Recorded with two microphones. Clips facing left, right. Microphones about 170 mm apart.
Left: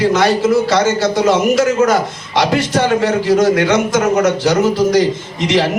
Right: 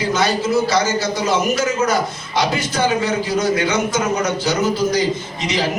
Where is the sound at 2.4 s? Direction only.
90° left.